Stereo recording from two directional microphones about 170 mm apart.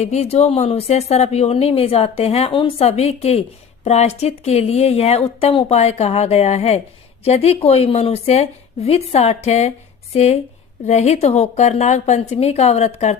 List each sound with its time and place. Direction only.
0.0 s speech: 40° left (ahead or behind)
10.8 s speech: 40° left (ahead or behind)